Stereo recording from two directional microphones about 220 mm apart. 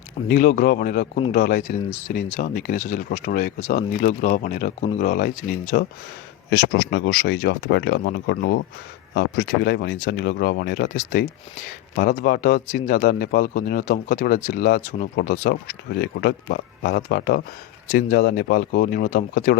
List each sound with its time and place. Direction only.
0.3 s speech: 40° left (ahead or behind)
6.7 s speech: 50° left (ahead or behind)
11.9 s speech: 45° left (ahead or behind)